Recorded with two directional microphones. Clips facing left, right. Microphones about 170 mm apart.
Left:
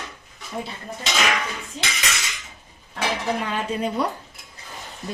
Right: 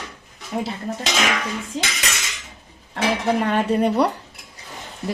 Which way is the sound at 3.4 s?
65° right (ahead or behind).